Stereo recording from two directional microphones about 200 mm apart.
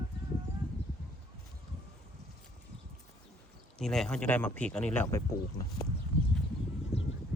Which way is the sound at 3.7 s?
Centre (ahead or behind).